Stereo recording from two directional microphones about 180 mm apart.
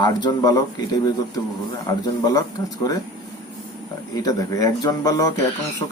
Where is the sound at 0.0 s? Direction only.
25° left (ahead or behind).